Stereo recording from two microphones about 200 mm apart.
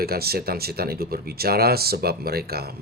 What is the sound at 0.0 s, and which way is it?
Speech, 50° right (ahead or behind).